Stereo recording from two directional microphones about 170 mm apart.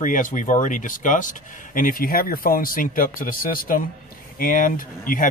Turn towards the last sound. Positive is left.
turn(degrees=50)  # may be behind; listen again after turning